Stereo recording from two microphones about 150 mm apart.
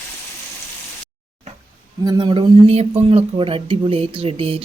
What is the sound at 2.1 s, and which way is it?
Speech, 30° right (ahead or behind).